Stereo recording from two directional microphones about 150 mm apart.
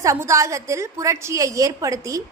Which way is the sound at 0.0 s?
20° right (ahead or behind).